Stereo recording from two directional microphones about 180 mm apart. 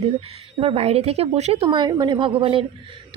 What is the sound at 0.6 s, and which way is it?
A woman's voice, 35° right (ahead or behind).